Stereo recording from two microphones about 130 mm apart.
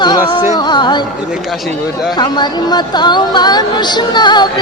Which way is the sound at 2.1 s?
35° left (ahead or behind).